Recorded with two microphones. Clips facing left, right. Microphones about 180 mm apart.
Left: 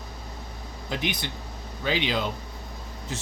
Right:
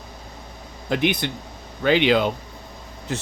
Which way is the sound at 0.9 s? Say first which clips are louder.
Right 9 dB; 60° right (ahead or behind).